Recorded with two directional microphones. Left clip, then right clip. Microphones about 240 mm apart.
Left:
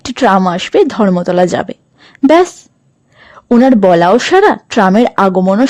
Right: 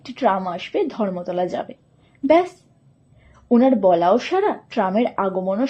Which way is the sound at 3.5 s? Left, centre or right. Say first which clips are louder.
Left 8 dB; left.